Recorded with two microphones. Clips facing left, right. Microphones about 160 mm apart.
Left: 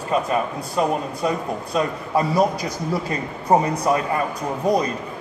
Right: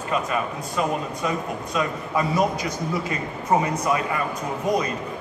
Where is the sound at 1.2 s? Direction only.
35° left (ahead or behind).